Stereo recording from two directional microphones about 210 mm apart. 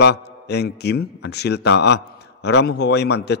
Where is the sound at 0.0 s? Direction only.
55° left (ahead or behind).